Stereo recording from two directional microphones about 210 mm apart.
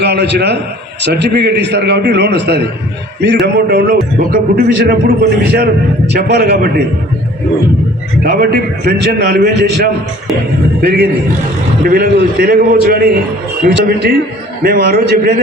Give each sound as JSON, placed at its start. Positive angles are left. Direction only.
{"t": 0.0, "sound": "a man's voice", "side_deg": -55}
{"t": 8.2, "sound": "a man's voice", "side_deg": -45}